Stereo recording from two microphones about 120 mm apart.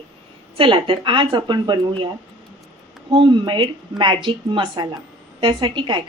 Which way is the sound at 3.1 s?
40° right (ahead or behind).